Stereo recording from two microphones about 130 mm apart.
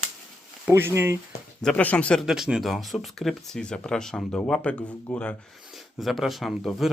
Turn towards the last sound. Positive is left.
turn(degrees=0)  # may be behind; listen again after turning